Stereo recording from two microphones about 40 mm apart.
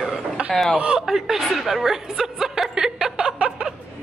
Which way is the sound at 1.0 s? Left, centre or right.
Centre.